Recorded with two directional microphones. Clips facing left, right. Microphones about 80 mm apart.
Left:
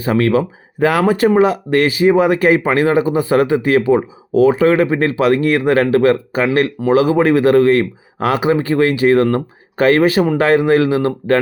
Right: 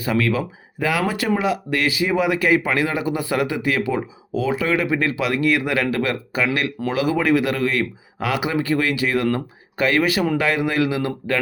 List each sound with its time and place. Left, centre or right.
0.0 s speech: left